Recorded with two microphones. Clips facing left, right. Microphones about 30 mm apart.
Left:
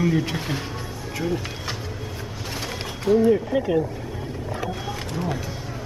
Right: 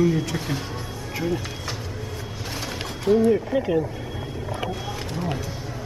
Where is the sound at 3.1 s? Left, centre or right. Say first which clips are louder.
Even; right.